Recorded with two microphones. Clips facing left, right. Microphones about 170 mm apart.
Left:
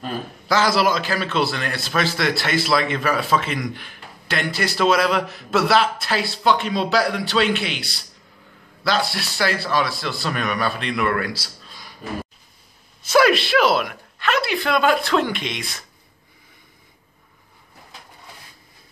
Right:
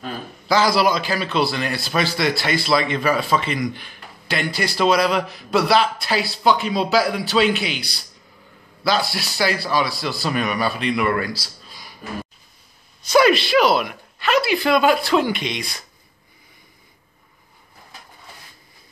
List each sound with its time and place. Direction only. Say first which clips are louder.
0.0 s a man's voice: left 2 dB; centre (ahead or behind)
11.4 s a sound: even; 5° right (ahead or behind)
13.1 s a man's voice: right 1 dB; centre (ahead or behind)